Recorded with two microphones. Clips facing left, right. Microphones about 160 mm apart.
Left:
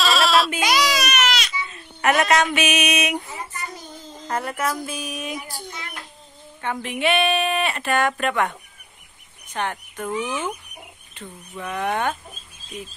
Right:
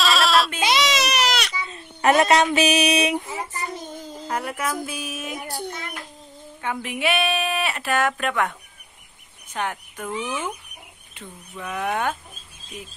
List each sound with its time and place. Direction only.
0.0 s sheep: centre (ahead or behind)
0.6 s baby cry: 25° right (ahead or behind)
1.7 s speech: 30° right (ahead or behind)
3.5 s child singing: 25° right (ahead or behind)
4.3 s speech: 10° right (ahead or behind)
5.4 s a child's voice: 65° right (ahead or behind)
6.6 s speech: 5° right (ahead or behind)
10.0 s speech: 10° left (ahead or behind)
11.5 s speech: 5° right (ahead or behind)